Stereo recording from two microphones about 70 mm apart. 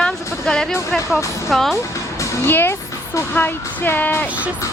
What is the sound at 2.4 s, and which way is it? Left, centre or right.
Speech, left.